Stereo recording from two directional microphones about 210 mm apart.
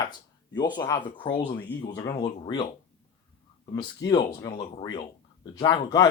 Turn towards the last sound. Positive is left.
turn(degrees=15)  # may be behind; listen again after turning